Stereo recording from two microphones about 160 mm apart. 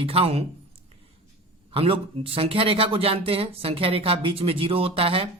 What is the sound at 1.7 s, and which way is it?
Speech, 35° right (ahead or behind).